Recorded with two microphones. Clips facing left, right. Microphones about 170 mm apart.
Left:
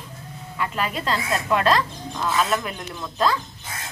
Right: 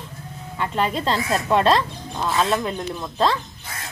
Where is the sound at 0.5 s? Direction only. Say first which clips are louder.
Right 3 dB; 25° right (ahead or behind).